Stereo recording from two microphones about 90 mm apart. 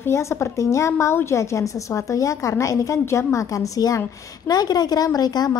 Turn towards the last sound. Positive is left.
turn(degrees=45)  # may be behind; listen again after turning